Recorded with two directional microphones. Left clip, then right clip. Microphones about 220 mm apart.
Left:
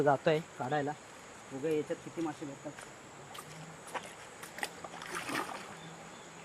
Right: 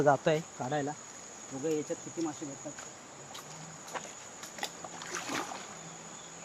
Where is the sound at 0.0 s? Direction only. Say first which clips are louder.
Right 2 dB; 25° right (ahead or behind).